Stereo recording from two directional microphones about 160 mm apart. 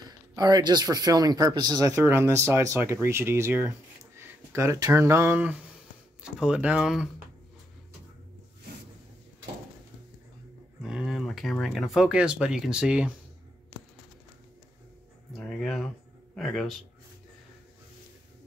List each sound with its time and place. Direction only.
0.4 s speech: 25° right (ahead or behind); by 7.1 s 5° right (ahead or behind)
10.8 s speech: 5° right (ahead or behind)
15.3 s speech: 5° left (ahead or behind)